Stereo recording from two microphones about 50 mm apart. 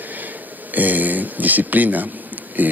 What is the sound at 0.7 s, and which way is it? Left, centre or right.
Speech, right.